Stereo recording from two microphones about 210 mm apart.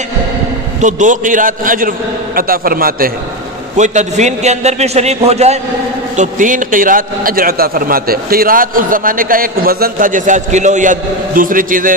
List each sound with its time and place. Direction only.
0.7 s a man's voice: 35° right (ahead or behind)